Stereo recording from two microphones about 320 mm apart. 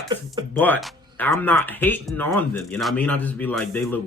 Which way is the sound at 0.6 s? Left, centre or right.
Centre.